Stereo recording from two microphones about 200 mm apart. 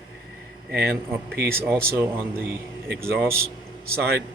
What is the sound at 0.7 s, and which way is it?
Speech, 50° right (ahead or behind).